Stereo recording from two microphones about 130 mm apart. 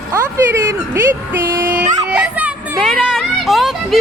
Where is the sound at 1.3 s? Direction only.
20° right (ahead or behind).